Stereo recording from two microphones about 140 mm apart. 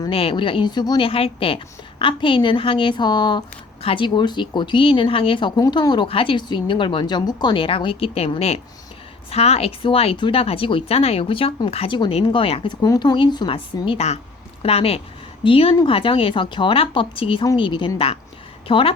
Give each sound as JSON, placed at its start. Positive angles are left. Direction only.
{"t": 0.1, "sound": "speech", "side_deg": 40}
{"t": 12.8, "sound": "speech", "side_deg": 30}